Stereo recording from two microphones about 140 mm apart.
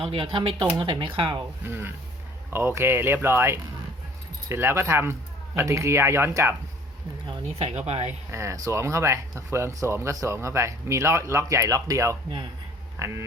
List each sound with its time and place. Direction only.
0.0 s speech: 40° right (ahead or behind)
1.6 s speech: 15° right (ahead or behind)
7.7 s speech: 50° right (ahead or behind)
8.3 s speech: 20° right (ahead or behind)